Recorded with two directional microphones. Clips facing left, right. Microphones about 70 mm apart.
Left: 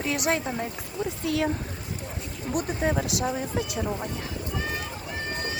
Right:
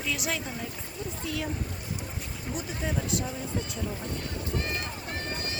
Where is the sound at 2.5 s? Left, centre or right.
Left.